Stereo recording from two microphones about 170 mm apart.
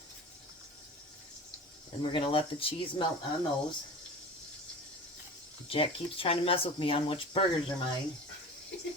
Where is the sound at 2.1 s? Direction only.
30° left (ahead or behind).